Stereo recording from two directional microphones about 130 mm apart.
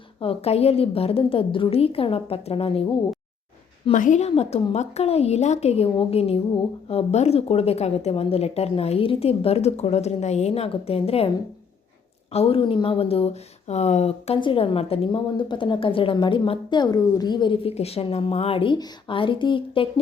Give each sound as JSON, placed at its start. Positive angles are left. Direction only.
{"t": 0.2, "sound": "a woman's voice", "side_deg": 50}
{"t": 3.9, "sound": "a woman's voice", "side_deg": 75}
{"t": 4.3, "sound": "a woman's voice", "side_deg": 55}
{"t": 12.3, "sound": "a woman's voice", "side_deg": 50}
{"t": 14.3, "sound": "a woman's voice", "side_deg": 40}